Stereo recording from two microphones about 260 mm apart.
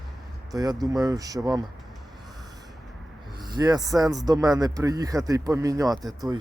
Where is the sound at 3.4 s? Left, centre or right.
Centre.